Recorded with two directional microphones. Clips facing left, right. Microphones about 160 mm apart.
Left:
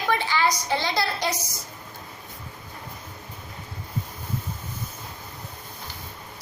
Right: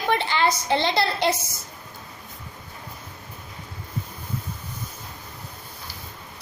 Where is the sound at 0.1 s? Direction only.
25° right (ahead or behind).